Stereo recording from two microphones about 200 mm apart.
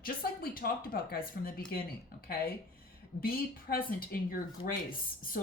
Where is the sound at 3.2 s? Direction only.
50° left (ahead or behind).